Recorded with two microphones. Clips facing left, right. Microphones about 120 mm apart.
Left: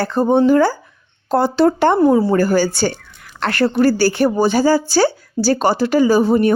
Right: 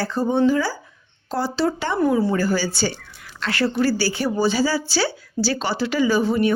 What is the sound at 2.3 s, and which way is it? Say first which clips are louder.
Speech: left 7 dB; 50° left (ahead or behind).